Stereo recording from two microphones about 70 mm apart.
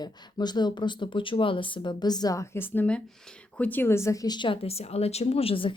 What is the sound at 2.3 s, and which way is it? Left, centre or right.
Speech, left.